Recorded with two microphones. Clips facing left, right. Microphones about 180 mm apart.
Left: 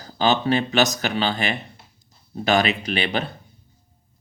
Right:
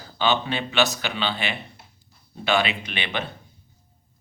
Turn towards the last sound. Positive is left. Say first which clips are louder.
# left 6 dB
turn(degrees=35)  # may be behind; listen again after turning